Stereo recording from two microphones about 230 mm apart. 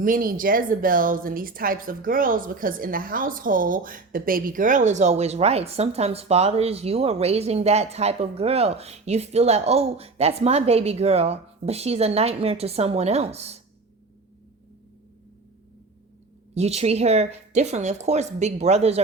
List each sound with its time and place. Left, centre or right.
0.0 s a woman's voice: right
16.6 s a woman's voice: right